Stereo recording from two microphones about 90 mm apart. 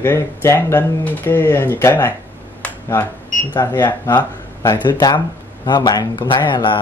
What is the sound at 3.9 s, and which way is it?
Speech, 25° left (ahead or behind).